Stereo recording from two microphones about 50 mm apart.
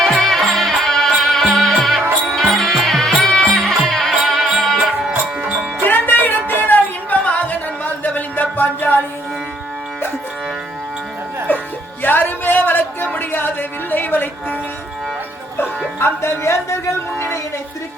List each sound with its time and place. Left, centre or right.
0.0 s music: centre
4.3 s music: centre
5.8 s music: left
11.5 s music: left
16.0 s speech: left
17.2 s a sound: left